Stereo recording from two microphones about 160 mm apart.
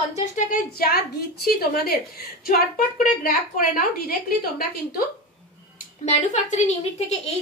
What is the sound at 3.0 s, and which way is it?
Speech, 60° left (ahead or behind).